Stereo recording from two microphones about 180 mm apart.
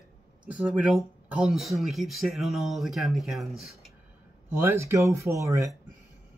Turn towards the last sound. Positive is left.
turn(degrees=-15)  # may be behind; listen again after turning